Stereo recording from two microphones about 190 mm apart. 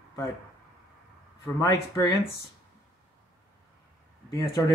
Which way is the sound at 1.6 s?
15° left (ahead or behind).